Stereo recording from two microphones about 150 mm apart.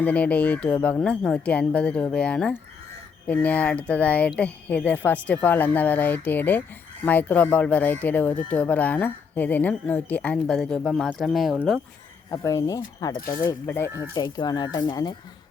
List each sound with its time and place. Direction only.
0.0 s speech: 10° left (ahead or behind)
12.3 s speech: 20° left (ahead or behind)
13.1 s speech: 75° left (ahead or behind)
13.7 s speech: 15° left (ahead or behind)
14.2 s speech: 25° left (ahead or behind)